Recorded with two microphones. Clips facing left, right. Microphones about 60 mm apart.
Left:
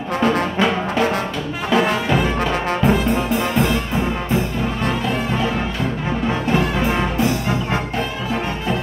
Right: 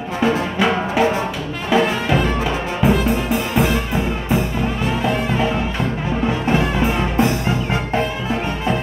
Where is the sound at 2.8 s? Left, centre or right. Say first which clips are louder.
Right 2 dB; centre.